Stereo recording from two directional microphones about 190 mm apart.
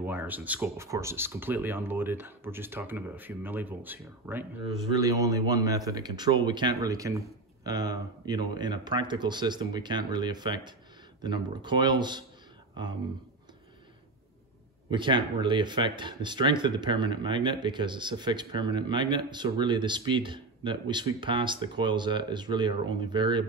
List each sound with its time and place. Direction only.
0.0 s speech: 10° right (ahead or behind)
14.9 s speech: 25° right (ahead or behind)